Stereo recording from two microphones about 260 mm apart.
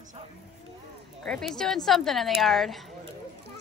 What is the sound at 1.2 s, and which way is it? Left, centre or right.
A woman's voice, centre.